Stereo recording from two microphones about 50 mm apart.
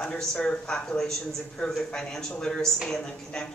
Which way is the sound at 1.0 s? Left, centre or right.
Centre.